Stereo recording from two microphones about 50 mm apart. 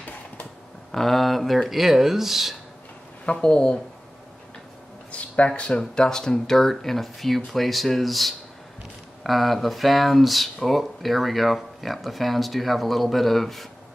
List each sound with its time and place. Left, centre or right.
0.9 s speech: centre
3.3 s speech: centre
5.1 s a sound: left
5.5 s speech: left
5.8 s speech: centre